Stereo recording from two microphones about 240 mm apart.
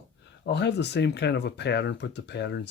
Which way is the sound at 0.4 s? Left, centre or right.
Left.